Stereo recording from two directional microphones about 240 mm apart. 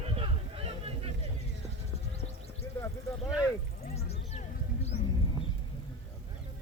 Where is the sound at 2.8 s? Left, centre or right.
Centre.